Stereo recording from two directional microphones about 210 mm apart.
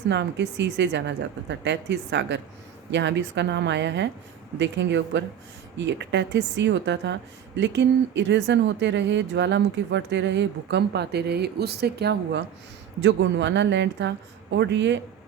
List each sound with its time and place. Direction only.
0.1 s speech: 55° right (ahead or behind)